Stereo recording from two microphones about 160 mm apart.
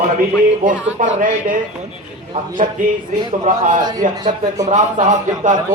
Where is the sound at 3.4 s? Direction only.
55° right (ahead or behind).